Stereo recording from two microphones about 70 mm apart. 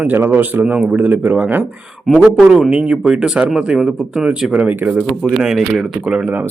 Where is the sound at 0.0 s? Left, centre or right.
Right.